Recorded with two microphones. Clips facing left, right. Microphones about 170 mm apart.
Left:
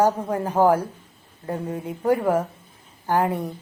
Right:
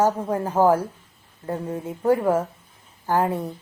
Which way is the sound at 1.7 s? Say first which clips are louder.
Right 1 dB; 15° left (ahead or behind).